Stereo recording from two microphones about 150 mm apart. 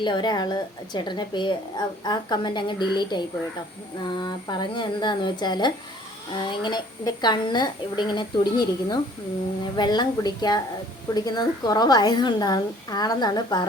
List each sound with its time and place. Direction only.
0.0 s a woman's voice: 30° left (ahead or behind)